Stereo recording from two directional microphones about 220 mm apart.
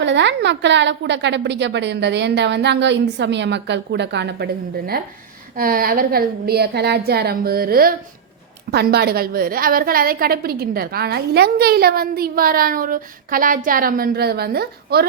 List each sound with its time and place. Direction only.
0.0 s a woman's voice: 55° right (ahead or behind)
5.5 s a woman's voice: 40° right (ahead or behind)